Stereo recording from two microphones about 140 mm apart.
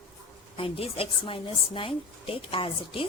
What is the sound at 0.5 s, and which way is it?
A woman's voice, 40° left (ahead or behind).